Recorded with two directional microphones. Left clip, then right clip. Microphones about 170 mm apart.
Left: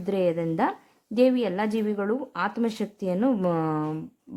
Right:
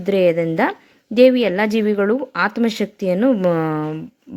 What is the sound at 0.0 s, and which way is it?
A woman's voice, 20° right (ahead or behind).